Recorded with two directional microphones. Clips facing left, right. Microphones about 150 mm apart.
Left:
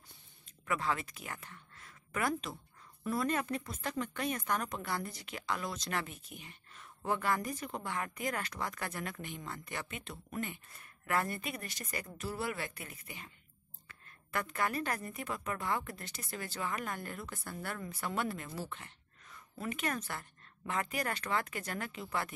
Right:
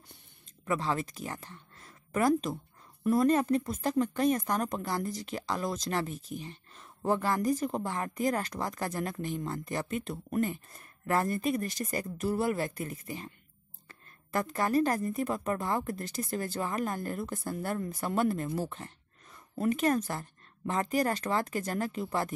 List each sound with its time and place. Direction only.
0.7 s a woman's voice: 30° right (ahead or behind)